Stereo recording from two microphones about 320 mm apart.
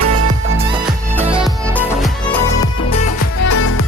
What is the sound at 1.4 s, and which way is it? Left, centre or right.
Music, centre.